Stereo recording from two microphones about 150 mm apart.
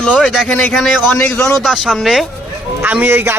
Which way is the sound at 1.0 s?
15° left (ahead or behind).